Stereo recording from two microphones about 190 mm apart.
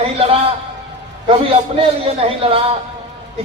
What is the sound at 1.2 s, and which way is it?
A man's voice, 30° right (ahead or behind).